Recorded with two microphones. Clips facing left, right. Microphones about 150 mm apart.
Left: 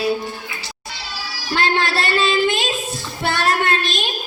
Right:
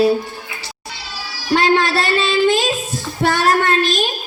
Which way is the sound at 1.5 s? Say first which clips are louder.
Right 5 dB; 40° right (ahead or behind).